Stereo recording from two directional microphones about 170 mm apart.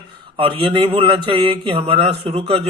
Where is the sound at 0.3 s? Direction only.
30° right (ahead or behind).